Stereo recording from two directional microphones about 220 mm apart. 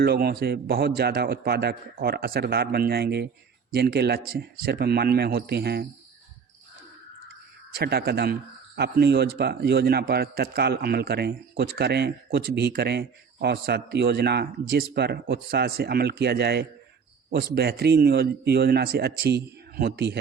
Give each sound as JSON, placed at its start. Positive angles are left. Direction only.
{"t": 0.0, "sound": "speech", "side_deg": -45}
{"t": 7.8, "sound": "speech", "side_deg": -45}